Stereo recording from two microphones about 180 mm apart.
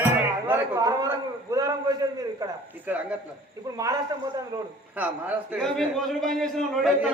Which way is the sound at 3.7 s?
20° right (ahead or behind).